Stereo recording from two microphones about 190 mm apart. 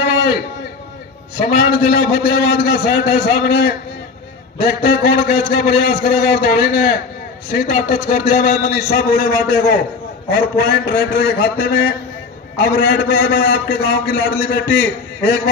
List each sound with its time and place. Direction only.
1.4 s a man's voice: 50° left (ahead or behind)